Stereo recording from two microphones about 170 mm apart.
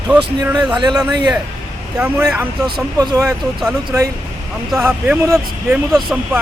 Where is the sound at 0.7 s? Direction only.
25° right (ahead or behind).